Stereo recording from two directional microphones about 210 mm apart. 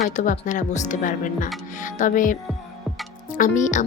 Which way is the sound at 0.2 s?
35° left (ahead or behind).